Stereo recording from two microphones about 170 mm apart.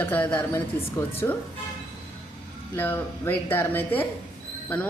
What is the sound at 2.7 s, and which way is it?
Speech, 10° left (ahead or behind).